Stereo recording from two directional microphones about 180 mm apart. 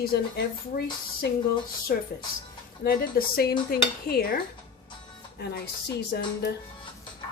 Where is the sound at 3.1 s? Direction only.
55° left (ahead or behind).